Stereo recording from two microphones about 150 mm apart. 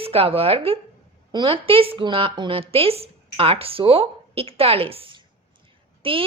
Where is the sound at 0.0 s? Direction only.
40° right (ahead or behind).